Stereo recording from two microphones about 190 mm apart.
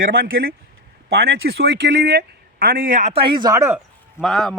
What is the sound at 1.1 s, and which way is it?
A man's voice, 55° right (ahead or behind).